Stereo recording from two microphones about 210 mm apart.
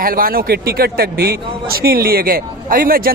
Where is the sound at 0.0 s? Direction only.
45° right (ahead or behind).